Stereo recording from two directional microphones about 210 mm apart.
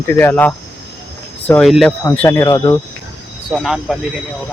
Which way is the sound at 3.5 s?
Centre (ahead or behind).